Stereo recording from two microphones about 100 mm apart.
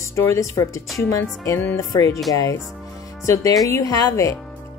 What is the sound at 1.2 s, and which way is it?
Speech, 20° left (ahead or behind).